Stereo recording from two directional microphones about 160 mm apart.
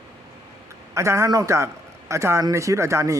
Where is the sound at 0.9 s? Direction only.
20° right (ahead or behind).